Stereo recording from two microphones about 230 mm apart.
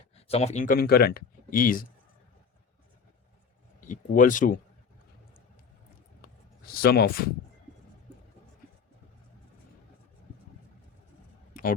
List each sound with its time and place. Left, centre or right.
0.3 s speech: left
3.8 s speech: left
6.7 s speech: left
11.6 s a sound: left